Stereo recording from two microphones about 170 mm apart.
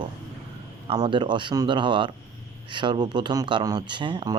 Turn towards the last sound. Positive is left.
turn(degrees=-25)  # may be behind; listen again after turning